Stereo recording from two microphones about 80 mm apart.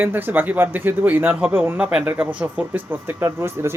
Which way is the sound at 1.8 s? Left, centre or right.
Centre.